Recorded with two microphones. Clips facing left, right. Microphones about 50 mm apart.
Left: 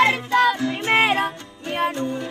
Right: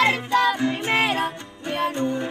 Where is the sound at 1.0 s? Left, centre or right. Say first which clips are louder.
Left 4 dB; left.